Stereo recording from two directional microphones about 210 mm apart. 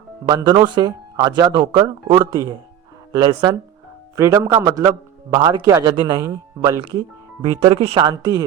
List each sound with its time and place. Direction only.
0.3 s a man's voice: 20° right (ahead or behind)